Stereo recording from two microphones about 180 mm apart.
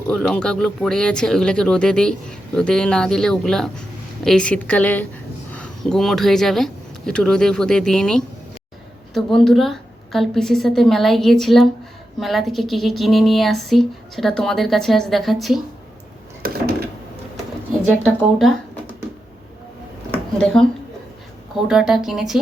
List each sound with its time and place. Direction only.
0.1 s speech: 5° left (ahead or behind)
16.4 s a sound: 55° right (ahead or behind)
18.0 s speech: centre (ahead or behind)
20.4 s speech: 5° left (ahead or behind)